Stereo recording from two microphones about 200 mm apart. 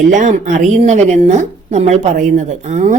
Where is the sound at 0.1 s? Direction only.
40° right (ahead or behind).